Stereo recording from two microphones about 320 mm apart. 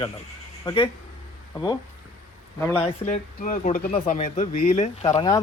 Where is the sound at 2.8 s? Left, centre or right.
Left.